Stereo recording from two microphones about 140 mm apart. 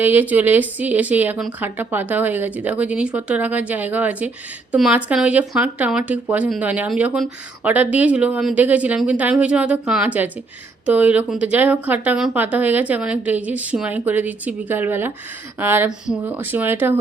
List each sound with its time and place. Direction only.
0.0 s a woman's voice: 15° right (ahead or behind)